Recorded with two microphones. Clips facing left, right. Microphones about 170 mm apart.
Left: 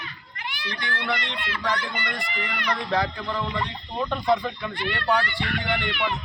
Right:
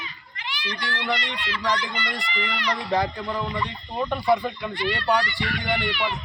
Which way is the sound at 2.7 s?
15° right (ahead or behind).